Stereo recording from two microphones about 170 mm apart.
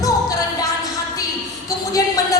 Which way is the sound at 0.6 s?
20° left (ahead or behind).